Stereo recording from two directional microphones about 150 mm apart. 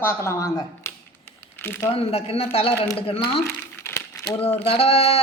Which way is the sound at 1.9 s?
40° left (ahead or behind).